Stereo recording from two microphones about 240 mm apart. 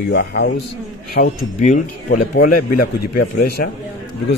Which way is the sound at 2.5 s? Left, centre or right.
Left.